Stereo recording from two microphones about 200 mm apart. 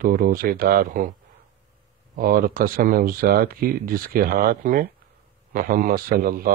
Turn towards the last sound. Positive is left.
turn(degrees=-45)  # may be behind; listen again after turning